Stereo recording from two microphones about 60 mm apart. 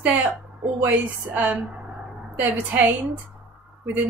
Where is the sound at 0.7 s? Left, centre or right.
Right.